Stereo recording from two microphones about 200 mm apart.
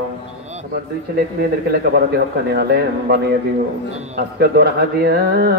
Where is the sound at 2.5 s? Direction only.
55° right (ahead or behind).